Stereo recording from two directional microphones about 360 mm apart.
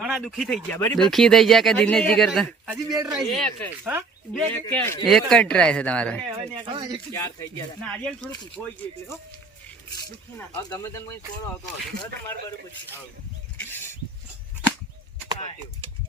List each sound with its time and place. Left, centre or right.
0.0 s speech: centre
6.3 s speech: centre
7.1 s speech: centre
10.3 s speech: centre